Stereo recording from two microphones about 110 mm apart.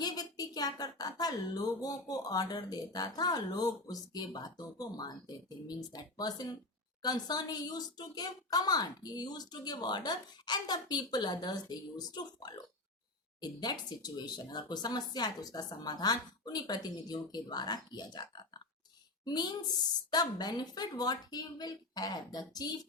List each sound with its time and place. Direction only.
0.0 s speech: 35° left (ahead or behind)